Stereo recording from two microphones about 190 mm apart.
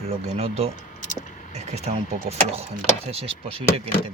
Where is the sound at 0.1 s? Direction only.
35° right (ahead or behind).